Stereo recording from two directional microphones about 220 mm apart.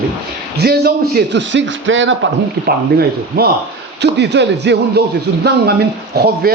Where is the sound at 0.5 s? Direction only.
45° right (ahead or behind).